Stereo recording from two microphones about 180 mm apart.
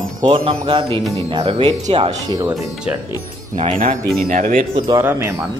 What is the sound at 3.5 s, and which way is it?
Speech, 45° right (ahead or behind).